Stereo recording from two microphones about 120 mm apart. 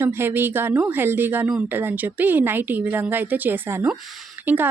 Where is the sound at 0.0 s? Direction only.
20° right (ahead or behind).